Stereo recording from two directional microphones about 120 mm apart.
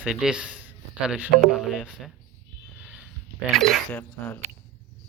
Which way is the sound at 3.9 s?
15° left (ahead or behind).